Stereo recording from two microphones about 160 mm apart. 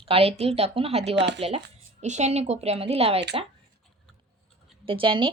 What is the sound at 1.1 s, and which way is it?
Speech, 90° right.